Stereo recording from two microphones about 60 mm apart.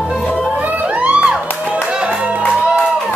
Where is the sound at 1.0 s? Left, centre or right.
Centre.